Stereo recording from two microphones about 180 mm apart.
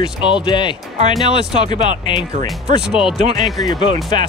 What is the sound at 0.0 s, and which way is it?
Speech, 25° left (ahead or behind).